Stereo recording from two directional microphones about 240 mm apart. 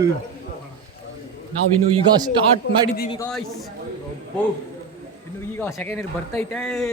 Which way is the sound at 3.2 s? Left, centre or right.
Centre.